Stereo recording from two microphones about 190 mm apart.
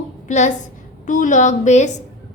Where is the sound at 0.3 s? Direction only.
40° left (ahead or behind).